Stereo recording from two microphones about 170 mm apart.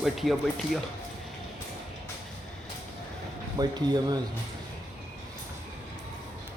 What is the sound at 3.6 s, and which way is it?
Speech, 25° right (ahead or behind).